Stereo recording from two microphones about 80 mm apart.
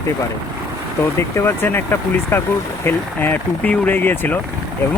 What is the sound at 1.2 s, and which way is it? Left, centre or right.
Speech, left.